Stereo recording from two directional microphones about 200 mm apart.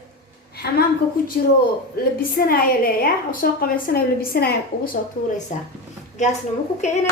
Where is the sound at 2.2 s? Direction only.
45° left (ahead or behind).